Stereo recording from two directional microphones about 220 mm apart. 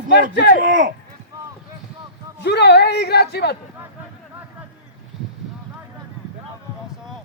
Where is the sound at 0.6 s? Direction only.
35° right (ahead or behind).